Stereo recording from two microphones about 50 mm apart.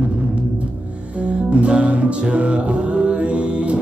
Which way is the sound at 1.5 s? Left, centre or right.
Right.